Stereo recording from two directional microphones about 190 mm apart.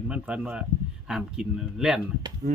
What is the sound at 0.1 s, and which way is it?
Speech, 5° right (ahead or behind).